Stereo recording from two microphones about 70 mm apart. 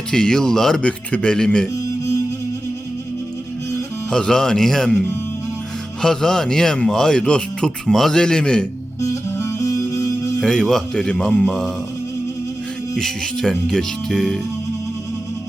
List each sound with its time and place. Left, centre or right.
0.1 s speech: centre
4.1 s speech: centre
6.0 s speech: centre
9.0 s music: left
10.4 s speech: centre
13.0 s speech: centre